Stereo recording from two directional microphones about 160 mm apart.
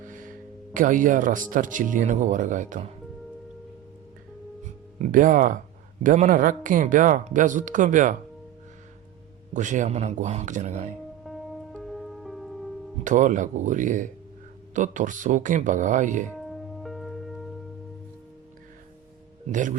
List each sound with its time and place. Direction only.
0.0 s speech: 55° right (ahead or behind)
4.6 s music: 55° right (ahead or behind)
6.0 s speech: 55° right (ahead or behind)
9.5 s speech: 50° right (ahead or behind)
11.2 s music: centre (ahead or behind)
13.1 s speech: 50° right (ahead or behind)
16.3 s music: centre (ahead or behind)
19.5 s speech: 50° right (ahead or behind)